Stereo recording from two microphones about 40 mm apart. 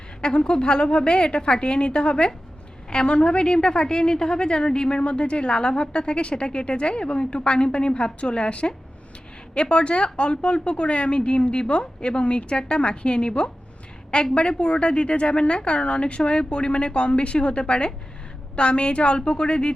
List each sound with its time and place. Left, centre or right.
0.2 s a woman's voice: left